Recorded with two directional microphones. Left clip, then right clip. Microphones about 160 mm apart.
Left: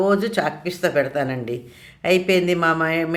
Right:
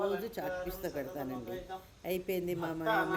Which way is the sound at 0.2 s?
45° right (ahead or behind).